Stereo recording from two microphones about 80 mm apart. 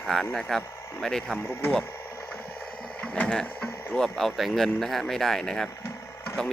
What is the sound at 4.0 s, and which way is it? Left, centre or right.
Speech, centre.